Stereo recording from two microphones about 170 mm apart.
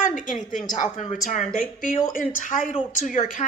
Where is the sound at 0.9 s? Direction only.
50° left (ahead or behind).